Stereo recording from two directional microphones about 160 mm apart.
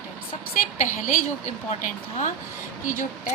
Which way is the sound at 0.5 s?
50° left (ahead or behind).